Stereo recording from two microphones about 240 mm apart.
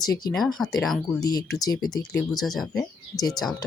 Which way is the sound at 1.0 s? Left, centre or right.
Centre.